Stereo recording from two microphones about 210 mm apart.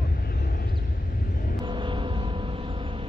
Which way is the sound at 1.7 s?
25° right (ahead or behind).